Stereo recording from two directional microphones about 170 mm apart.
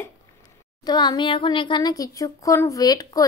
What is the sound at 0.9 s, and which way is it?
A child's voice, 25° left (ahead or behind).